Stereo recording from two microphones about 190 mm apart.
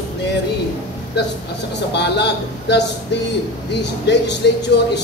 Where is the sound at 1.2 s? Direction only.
60° left (ahead or behind).